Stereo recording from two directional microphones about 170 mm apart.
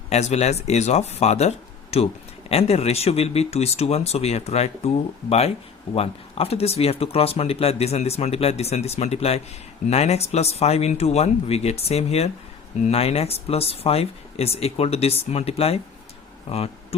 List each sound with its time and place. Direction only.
0.1 s speech: 40° left (ahead or behind)
5.9 s speech: 35° left (ahead or behind)